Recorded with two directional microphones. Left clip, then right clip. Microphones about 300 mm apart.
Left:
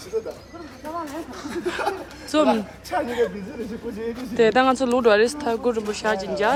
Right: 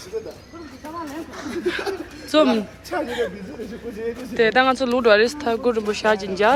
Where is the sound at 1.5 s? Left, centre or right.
Centre.